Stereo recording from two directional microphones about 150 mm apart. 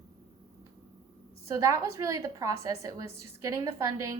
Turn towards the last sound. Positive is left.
turn(degrees=-20)  # may be behind; listen again after turning